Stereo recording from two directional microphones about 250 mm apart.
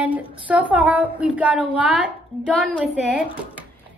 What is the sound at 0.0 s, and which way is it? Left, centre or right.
A woman's voice, centre.